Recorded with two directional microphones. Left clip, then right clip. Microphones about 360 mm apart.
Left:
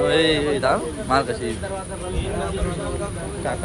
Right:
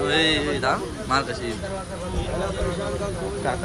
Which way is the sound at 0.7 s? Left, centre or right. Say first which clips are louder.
Left 3 dB; centre.